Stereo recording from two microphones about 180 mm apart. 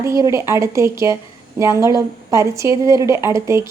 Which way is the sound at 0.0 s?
15° right (ahead or behind).